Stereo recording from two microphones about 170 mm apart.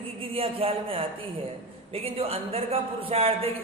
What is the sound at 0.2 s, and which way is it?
A man's voice, 35° right (ahead or behind).